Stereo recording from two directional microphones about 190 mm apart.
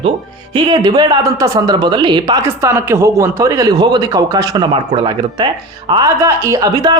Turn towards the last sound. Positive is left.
turn(degrees=-20)  # may be behind; listen again after turning